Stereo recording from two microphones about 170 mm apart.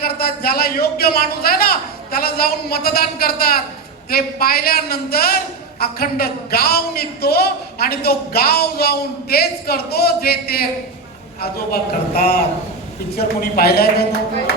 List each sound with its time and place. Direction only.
0.0 s a man's voice: 65° left (ahead or behind)